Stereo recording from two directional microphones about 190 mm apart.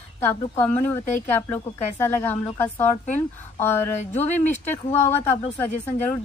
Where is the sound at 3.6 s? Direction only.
10° left (ahead or behind).